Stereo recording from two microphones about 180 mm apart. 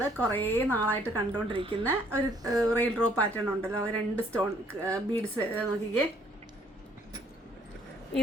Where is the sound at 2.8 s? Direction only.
10° left (ahead or behind).